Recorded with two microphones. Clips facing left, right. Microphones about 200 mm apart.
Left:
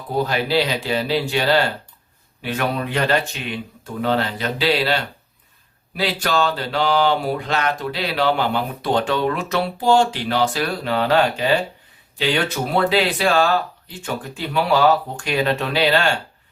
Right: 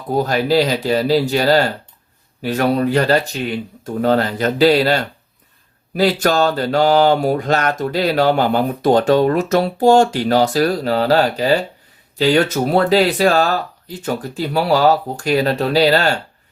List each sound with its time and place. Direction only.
0.1 s speech: 45° right (ahead or behind)